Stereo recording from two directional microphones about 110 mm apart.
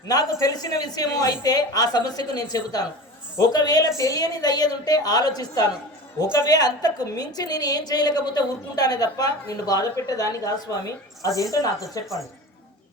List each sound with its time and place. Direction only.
0.1 s a woman's voice: 35° left (ahead or behind)